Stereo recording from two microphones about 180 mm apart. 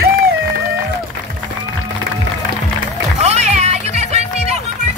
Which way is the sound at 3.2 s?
40° right (ahead or behind).